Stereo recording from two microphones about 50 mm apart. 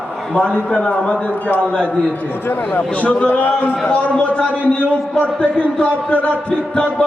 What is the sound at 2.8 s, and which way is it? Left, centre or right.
A man's voice, left.